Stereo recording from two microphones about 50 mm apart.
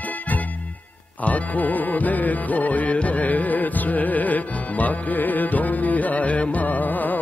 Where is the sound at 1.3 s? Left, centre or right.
Left.